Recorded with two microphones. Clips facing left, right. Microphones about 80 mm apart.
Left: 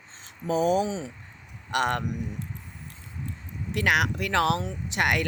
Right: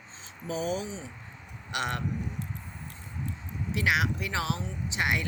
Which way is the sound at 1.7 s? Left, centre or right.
Left.